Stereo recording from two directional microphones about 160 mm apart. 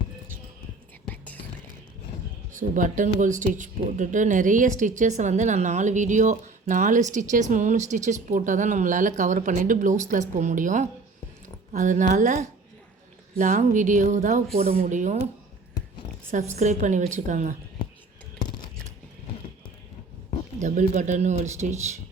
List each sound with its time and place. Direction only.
1.0 s whispering: 10° left (ahead or behind)
2.5 s speech: 55° right (ahead or behind)
14.5 s speech: 40° right (ahead or behind)
14.8 s speech: 50° right (ahead or behind)
16.6 s speech: 50° right (ahead or behind)
20.6 s speech: 50° right (ahead or behind)